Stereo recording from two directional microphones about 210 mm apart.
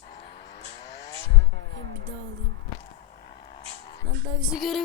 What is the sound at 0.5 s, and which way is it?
Vehicle, 55° left (ahead or behind).